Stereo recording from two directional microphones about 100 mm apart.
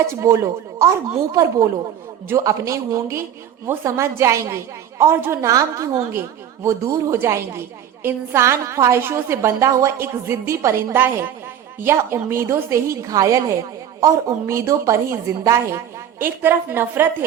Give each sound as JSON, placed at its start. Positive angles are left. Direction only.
{"t": 0.1, "sound": "a woman's voice", "side_deg": -30}